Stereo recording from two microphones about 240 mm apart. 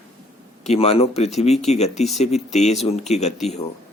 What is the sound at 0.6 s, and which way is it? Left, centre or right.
Speech, left.